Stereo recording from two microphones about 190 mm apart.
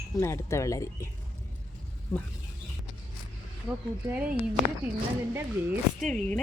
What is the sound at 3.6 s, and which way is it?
Speech, 5° right (ahead or behind).